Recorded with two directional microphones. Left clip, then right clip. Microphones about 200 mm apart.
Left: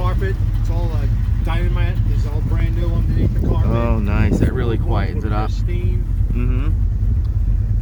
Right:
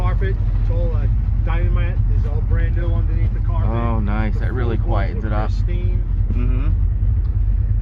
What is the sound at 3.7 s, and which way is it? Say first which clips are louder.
Speech: left 1 dB; 15° left (ahead or behind).